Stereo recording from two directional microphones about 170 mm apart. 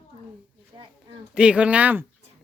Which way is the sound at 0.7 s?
30° right (ahead or behind).